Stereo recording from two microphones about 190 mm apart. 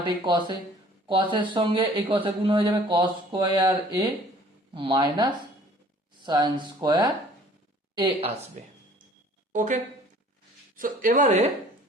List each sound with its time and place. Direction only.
0.0 s a man's voice: 25° right (ahead or behind)
8.6 s speech: 40° right (ahead or behind)
10.8 s speech: 45° right (ahead or behind)